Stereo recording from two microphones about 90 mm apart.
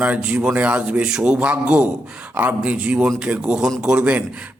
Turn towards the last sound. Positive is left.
turn(degrees=-15)  # may be behind; listen again after turning